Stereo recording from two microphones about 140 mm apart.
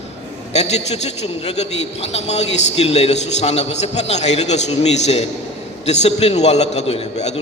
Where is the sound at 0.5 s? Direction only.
50° left (ahead or behind).